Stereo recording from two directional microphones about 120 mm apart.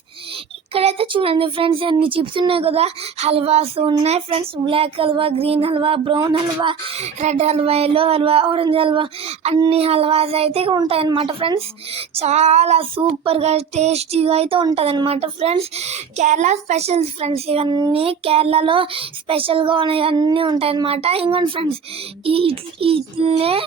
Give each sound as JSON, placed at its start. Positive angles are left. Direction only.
{"t": 0.7, "sound": "speech", "side_deg": -55}
{"t": 6.3, "sound": "a sound", "side_deg": -45}
{"t": 10.8, "sound": "speech", "side_deg": -50}
{"t": 13.0, "sound": "a sound", "side_deg": -50}
{"t": 17.7, "sound": "a child's voice", "side_deg": -35}
{"t": 17.9, "sound": "speech", "side_deg": -55}